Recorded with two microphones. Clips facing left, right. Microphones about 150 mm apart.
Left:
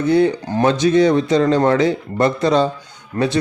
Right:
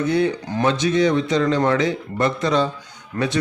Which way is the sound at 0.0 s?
30° left (ahead or behind).